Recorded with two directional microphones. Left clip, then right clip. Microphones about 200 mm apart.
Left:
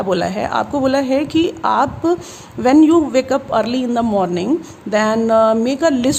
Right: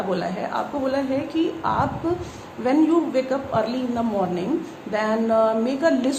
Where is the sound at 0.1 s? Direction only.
50° left (ahead or behind).